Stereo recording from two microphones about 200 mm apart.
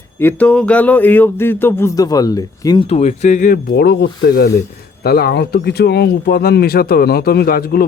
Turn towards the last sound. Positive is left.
turn(degrees=50)  # may be behind; listen again after turning